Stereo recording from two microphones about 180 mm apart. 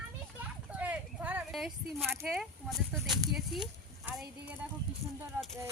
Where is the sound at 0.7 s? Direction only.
10° right (ahead or behind).